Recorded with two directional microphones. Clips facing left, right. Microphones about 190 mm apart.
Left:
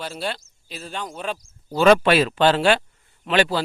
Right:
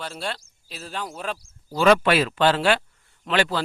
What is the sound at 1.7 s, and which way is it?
A man's voice, 25° left (ahead or behind).